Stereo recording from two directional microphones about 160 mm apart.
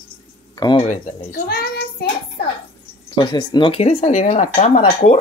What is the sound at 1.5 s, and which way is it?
Child singing, 75° left (ahead or behind).